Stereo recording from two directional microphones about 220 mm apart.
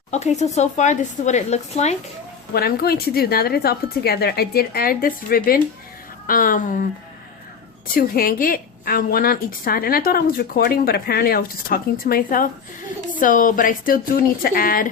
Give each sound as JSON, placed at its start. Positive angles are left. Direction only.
{"t": 0.1, "sound": "a woman's voice", "side_deg": 30}
{"t": 2.5, "sound": "a woman's voice", "side_deg": 45}
{"t": 7.9, "sound": "a woman's voice", "side_deg": 40}